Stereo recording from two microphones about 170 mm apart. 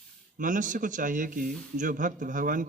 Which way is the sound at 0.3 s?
50° right (ahead or behind).